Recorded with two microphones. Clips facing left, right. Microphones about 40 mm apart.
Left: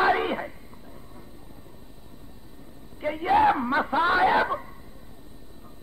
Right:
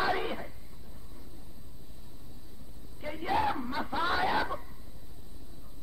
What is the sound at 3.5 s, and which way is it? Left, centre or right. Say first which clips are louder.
Speech: left 10 dB; left.